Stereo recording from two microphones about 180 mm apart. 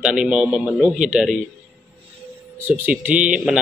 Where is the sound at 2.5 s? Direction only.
10° right (ahead or behind).